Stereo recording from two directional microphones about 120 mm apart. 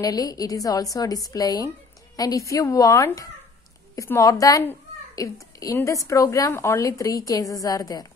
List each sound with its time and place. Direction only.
0.0 s a woman's voice: 30° left (ahead or behind)